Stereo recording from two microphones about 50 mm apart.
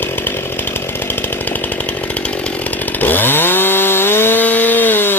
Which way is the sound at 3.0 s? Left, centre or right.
Left.